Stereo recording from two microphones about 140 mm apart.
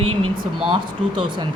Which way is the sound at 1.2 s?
35° right (ahead or behind).